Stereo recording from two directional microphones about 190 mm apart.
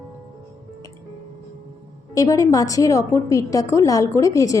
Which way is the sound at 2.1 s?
15° left (ahead or behind).